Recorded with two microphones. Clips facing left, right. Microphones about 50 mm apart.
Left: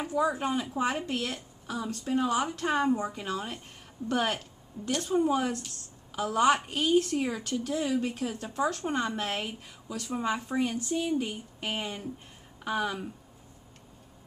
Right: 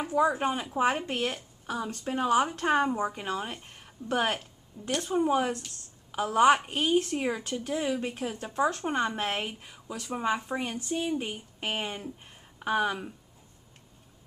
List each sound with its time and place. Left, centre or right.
0.1 s a woman's voice: right